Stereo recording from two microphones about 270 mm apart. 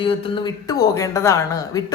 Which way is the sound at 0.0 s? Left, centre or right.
Centre.